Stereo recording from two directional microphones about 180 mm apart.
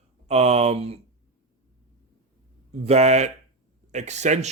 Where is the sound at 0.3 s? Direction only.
35° right (ahead or behind).